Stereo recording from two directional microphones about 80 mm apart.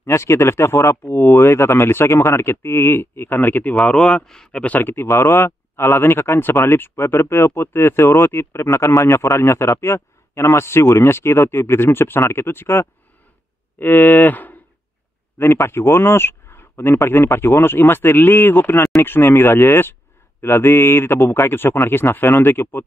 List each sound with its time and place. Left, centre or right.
0.0 s speech: left; by 4.7 s centre
4.7 s speech: left
13.7 s cattle: left
15.3 s speech: left